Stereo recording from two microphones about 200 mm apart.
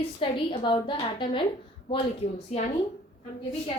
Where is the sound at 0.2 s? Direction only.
25° left (ahead or behind).